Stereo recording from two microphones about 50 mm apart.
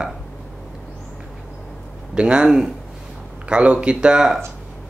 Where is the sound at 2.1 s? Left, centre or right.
Centre.